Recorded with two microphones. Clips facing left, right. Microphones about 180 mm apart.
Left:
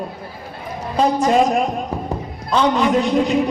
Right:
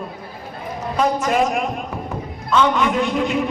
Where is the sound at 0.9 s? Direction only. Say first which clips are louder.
Left 3 dB; 30° left (ahead or behind).